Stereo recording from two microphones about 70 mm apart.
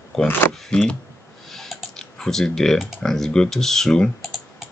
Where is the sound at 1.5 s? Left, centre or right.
Centre.